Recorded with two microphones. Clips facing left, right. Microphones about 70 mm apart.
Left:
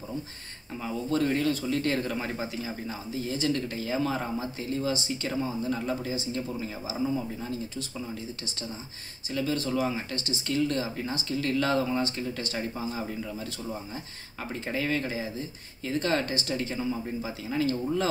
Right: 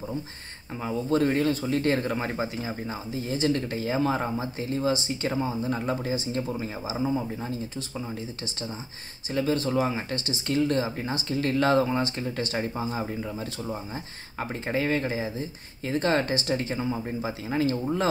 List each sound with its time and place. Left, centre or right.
0.8 s speech: right
9.3 s speech: right
14.4 s speech: right